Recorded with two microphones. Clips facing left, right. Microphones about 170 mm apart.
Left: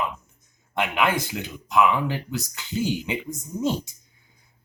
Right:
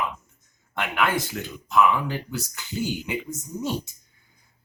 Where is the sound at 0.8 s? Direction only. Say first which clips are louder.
Left 2 dB; 15° left (ahead or behind).